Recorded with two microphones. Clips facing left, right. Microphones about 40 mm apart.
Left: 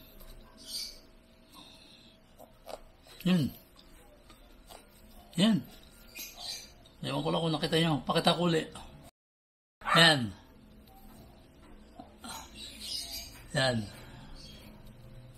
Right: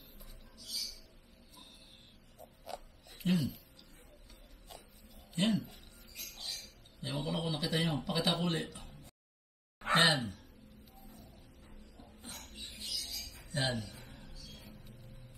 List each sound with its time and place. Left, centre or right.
0.6 s a sound: centre
2.7 s oink: centre
3.3 s speech: left
5.3 s speech: left
6.1 s music: centre
7.0 s speech: left
9.9 s gasp: left
12.4 s music: centre
13.5 s a sound: left
13.7 s a sound: left